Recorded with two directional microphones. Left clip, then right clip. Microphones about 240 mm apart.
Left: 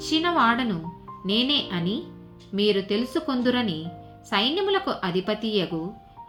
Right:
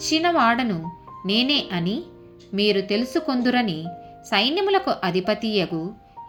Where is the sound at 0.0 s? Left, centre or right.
Right.